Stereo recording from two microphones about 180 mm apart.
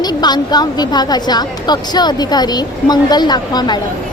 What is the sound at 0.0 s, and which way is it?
A woman's voice, 20° left (ahead or behind).